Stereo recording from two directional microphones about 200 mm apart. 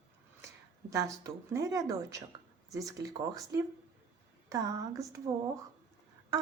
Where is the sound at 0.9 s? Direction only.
15° right (ahead or behind).